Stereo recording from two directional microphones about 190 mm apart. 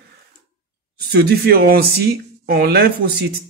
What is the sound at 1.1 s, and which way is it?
Speech, 55° right (ahead or behind).